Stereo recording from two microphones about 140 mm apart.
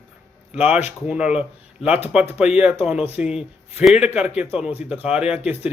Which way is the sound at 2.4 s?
5° right (ahead or behind).